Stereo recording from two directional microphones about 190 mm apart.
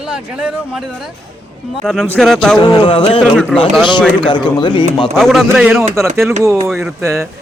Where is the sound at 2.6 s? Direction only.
25° left (ahead or behind).